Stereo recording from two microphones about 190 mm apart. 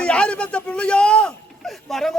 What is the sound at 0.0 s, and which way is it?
A child's voice, 5° left (ahead or behind).